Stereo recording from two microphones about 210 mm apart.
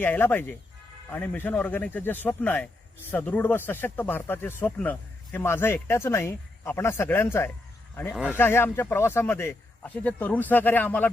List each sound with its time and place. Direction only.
0.0 s speech: 10° left (ahead or behind)